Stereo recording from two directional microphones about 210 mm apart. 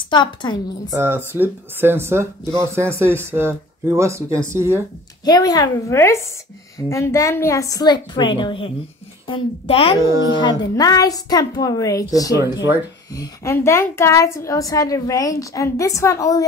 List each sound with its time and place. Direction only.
0.1 s a woman's voice: 20° left (ahead or behind)
0.8 s speech: 10° right (ahead or behind)
5.2 s a woman's voice: 20° left (ahead or behind)
9.9 s speech: 15° right (ahead or behind)
10.3 s a woman's voice: 20° left (ahead or behind)